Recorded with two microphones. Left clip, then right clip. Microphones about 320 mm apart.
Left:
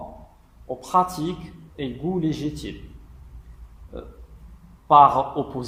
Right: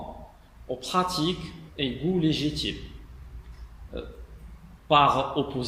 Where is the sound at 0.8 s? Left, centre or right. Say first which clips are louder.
Left 5 dB; centre.